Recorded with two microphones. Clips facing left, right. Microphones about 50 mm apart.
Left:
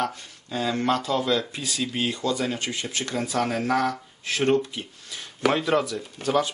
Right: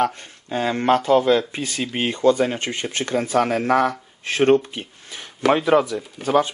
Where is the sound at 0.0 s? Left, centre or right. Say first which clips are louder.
Right 7 dB; right.